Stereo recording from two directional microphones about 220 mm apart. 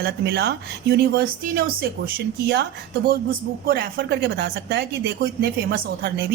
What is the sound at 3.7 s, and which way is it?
Speech, 45° right (ahead or behind).